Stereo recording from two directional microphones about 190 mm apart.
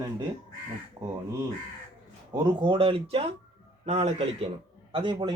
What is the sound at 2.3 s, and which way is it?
A man's voice, 25° right (ahead or behind).